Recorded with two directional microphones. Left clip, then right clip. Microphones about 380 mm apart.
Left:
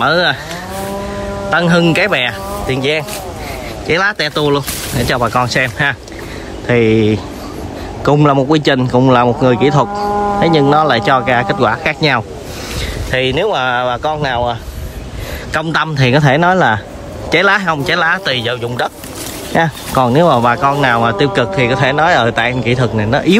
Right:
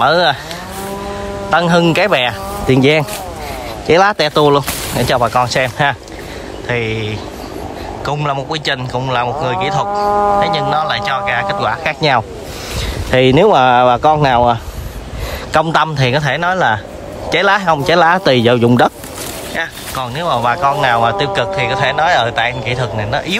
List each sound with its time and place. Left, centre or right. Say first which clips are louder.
0.0 s speech: right 1 dB; centre
1.5 s a man's voice: even; centre
20.0 s a man's voice: left 6 dB; centre